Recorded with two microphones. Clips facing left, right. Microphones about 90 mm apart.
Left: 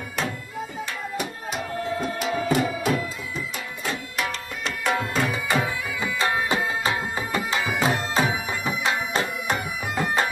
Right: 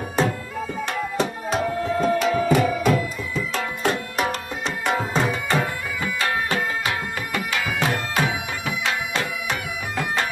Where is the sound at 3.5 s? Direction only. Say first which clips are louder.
Right 10 dB; 65° right (ahead or behind).